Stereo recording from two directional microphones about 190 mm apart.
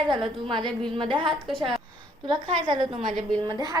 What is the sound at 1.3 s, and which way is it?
Speech, centre (ahead or behind).